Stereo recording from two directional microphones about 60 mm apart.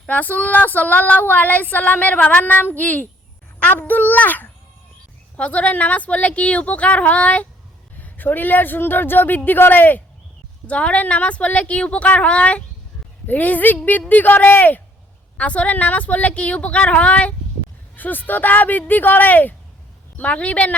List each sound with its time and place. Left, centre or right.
0.1 s female singing: left
3.6 s a man's voice: left
5.4 s female singing: left
8.0 s a man's voice: left
10.7 s female singing: left
17.9 s a man's voice: left
20.1 s female singing: left